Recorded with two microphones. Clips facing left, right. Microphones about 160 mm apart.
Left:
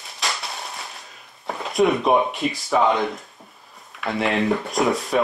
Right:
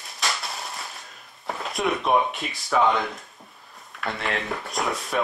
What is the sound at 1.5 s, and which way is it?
Speech, centre (ahead or behind).